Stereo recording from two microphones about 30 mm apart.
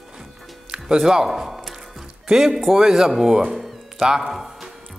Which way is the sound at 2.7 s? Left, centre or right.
Centre.